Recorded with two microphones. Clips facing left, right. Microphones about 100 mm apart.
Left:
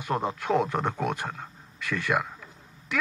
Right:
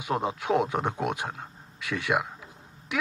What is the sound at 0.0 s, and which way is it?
Speech, 5° right (ahead or behind).